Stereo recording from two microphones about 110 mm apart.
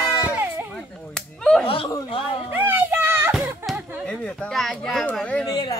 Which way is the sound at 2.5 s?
20° right (ahead or behind).